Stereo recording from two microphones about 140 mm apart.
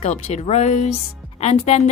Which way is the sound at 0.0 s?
55° left (ahead or behind).